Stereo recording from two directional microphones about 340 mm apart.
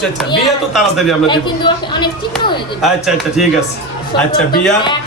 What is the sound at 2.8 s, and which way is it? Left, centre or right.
Speech, centre.